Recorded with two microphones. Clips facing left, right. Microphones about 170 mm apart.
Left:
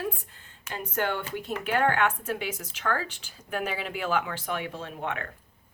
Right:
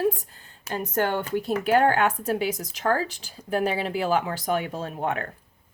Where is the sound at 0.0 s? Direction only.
40° right (ahead or behind).